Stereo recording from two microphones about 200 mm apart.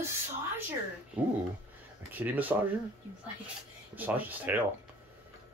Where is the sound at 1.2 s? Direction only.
5° right (ahead or behind).